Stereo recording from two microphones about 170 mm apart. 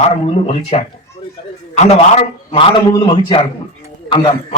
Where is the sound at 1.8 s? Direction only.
40° left (ahead or behind).